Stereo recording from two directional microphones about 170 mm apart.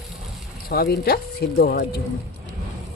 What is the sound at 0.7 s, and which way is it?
Speech, 65° left (ahead or behind).